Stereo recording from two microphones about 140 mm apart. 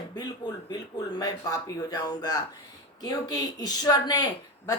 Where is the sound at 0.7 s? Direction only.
30° left (ahead or behind).